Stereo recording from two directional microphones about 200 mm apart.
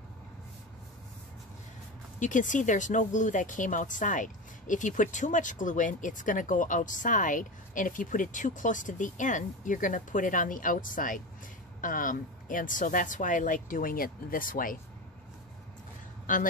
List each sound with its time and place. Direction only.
2.1 s speech: 40° left (ahead or behind)